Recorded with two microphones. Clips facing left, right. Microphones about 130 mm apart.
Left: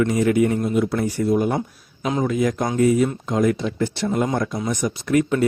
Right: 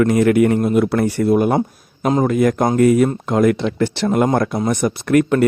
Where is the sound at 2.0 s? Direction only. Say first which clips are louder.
Right 5 dB; 50° right (ahead or behind).